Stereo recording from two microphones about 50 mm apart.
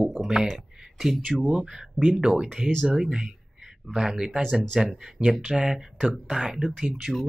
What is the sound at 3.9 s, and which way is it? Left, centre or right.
Speech, centre.